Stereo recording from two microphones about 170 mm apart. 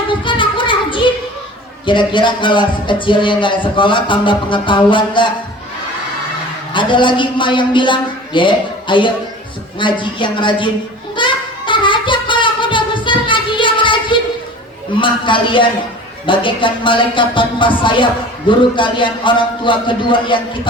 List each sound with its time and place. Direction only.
0.1 s a sound: 30° left (ahead or behind)
1.9 s speech: 30° left (ahead or behind)
6.7 s speech: 30° left (ahead or behind)
11.2 s singing: 30° left (ahead or behind)
15.0 s speech: 30° left (ahead or behind)